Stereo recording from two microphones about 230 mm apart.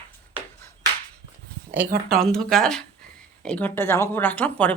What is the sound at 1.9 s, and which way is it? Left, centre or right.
Speech, right.